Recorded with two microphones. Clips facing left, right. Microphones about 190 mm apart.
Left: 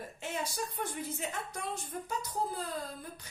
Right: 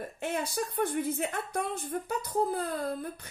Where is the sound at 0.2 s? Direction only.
60° right (ahead or behind).